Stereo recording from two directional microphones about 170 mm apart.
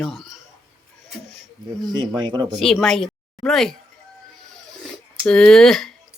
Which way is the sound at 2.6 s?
Centre (ahead or behind).